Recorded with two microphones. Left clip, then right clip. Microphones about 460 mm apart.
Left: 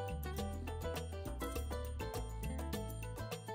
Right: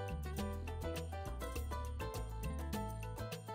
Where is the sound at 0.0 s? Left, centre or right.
Left.